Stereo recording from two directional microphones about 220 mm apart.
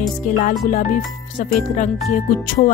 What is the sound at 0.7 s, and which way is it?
Speech, 35° left (ahead or behind).